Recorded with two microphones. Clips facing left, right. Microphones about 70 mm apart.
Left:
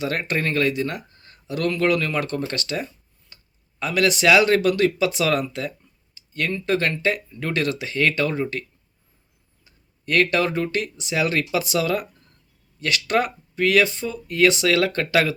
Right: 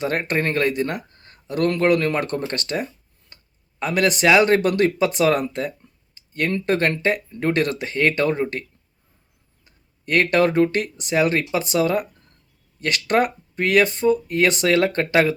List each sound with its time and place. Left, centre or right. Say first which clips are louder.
0.0 s speech: right 2 dB; right
3.3 s a sound: right 1 dB; right
3.8 s speech: right 1 dB; right
9.6 s speech: right 1 dB; right